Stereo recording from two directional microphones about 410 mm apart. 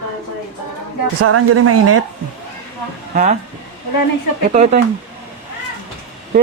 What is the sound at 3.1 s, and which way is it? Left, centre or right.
Speech, centre.